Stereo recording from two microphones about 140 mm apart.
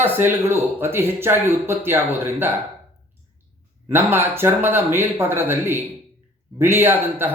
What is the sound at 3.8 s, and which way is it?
Speech, 15° right (ahead or behind).